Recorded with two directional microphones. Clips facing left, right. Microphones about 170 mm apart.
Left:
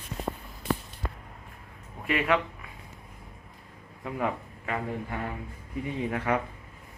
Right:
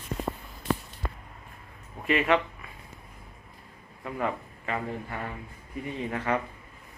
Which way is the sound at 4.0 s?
10° left (ahead or behind).